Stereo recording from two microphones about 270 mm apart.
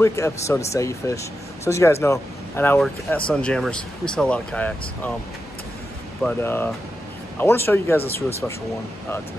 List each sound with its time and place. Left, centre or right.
0.0 s speech: centre
6.2 s speech: centre